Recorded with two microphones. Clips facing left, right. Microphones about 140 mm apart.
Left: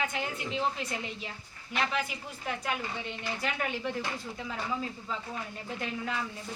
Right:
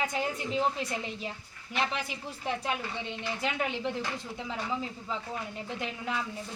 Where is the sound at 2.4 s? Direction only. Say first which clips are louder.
Right 1 dB; 30° right (ahead or behind).